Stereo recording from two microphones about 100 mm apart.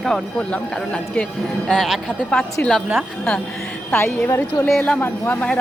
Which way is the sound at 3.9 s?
25° left (ahead or behind).